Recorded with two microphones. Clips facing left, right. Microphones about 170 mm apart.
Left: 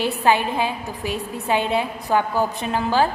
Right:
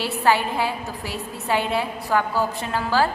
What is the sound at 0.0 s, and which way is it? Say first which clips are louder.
A woman's voice: left 2 dB; 20° left (ahead or behind).